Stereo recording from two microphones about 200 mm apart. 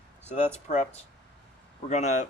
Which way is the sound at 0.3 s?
35° left (ahead or behind).